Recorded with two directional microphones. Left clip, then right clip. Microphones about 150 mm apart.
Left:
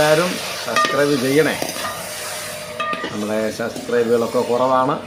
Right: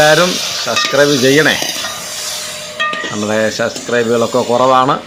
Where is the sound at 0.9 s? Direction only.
30° right (ahead or behind).